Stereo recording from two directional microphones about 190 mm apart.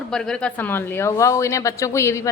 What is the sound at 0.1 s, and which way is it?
Speech, 5° left (ahead or behind).